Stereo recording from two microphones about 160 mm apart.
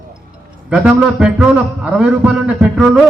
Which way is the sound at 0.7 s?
5° right (ahead or behind).